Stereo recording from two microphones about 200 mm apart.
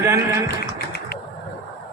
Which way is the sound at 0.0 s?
15° right (ahead or behind).